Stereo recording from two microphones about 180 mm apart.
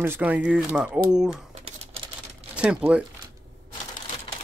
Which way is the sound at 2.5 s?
5° right (ahead or behind).